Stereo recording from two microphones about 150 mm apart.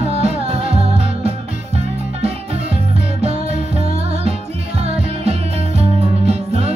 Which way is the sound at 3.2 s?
45° right (ahead or behind).